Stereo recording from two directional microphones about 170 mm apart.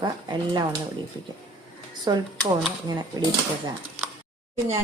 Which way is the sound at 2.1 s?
20° right (ahead or behind).